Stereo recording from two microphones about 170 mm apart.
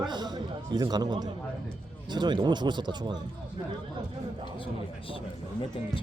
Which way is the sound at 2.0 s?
25° right (ahead or behind).